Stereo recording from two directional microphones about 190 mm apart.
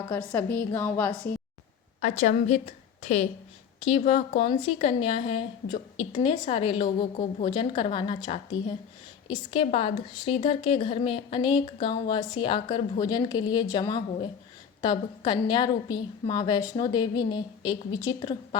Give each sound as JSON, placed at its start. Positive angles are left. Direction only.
{"t": 0.1, "sound": "a woman's voice", "side_deg": 10}
{"t": 2.0, "sound": "a woman's voice", "side_deg": 40}